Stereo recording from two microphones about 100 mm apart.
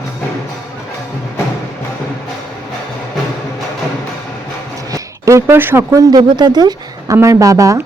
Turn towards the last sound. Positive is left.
turn(degrees=-35)  # may be behind; listen again after turning